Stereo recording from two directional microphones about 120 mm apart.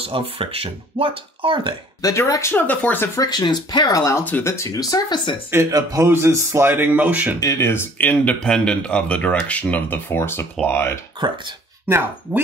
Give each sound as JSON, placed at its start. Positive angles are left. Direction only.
{"t": 0.0, "sound": "speech", "side_deg": -50}
{"t": 2.0, "sound": "speech", "side_deg": 30}
{"t": 3.2, "sound": "speech", "side_deg": 35}
{"t": 4.2, "sound": "speech", "side_deg": 15}
{"t": 5.5, "sound": "speech", "side_deg": -25}
{"t": 7.3, "sound": "speech", "side_deg": 25}
{"t": 11.2, "sound": "speech", "side_deg": -40}
{"t": 12.3, "sound": "speech", "side_deg": -10}